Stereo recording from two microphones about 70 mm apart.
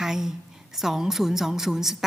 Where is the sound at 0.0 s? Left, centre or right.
Centre.